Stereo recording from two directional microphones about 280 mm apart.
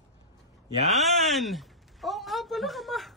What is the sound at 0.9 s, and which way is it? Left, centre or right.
A woman's voice, centre.